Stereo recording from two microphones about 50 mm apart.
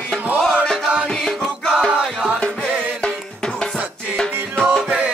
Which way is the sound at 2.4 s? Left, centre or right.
Centre.